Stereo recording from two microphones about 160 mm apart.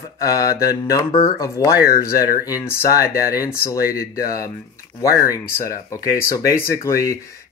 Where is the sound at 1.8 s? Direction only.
70° left (ahead or behind).